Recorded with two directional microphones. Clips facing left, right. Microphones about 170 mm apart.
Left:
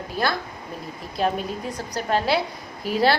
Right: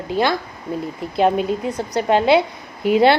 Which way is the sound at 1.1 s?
90° right.